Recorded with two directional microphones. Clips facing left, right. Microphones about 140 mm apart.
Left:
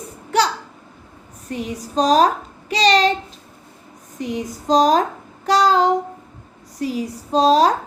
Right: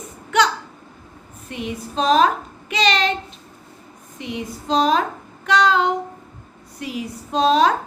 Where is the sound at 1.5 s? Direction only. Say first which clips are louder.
Left 2 dB; 40° left (ahead or behind).